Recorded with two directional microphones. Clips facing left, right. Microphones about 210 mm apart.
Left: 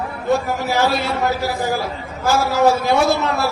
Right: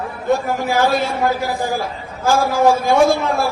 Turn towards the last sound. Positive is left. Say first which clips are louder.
# right 3 dB
turn(degrees=-50)  # may be behind; listen again after turning